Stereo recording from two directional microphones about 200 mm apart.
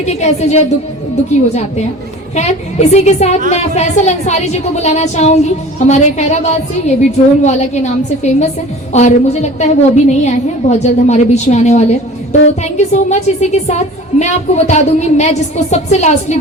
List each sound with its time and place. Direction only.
0.0 s speech: 35° left (ahead or behind)
2.3 s speech: 35° left (ahead or behind)